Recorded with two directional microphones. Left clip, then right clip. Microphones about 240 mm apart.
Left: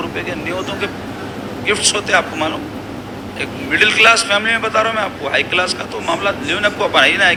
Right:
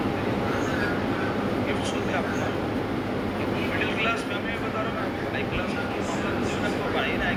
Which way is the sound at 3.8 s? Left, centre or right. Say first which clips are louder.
Left 19 dB; left.